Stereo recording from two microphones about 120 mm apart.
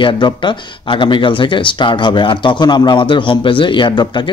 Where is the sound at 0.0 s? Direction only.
40° left (ahead or behind).